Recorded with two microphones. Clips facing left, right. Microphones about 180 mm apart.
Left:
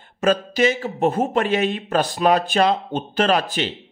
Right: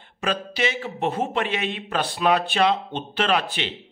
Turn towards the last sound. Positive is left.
turn(degrees=40)  # may be behind; listen again after turning